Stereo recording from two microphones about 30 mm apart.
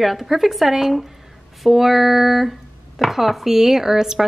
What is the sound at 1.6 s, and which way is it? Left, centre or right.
Speech, centre.